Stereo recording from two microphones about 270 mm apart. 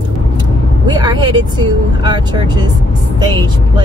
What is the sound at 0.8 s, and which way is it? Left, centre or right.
Vehicle, centre.